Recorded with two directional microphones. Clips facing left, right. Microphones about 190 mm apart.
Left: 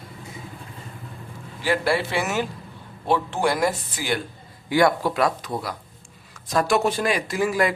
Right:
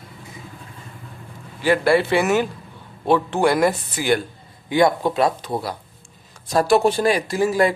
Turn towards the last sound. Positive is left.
turn(degrees=-30)  # may be behind; listen again after turning